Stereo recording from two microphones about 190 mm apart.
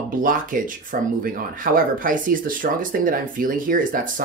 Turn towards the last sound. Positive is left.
turn(degrees=-45)  # may be behind; listen again after turning